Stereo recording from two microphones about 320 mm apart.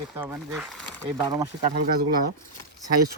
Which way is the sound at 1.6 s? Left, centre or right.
Right.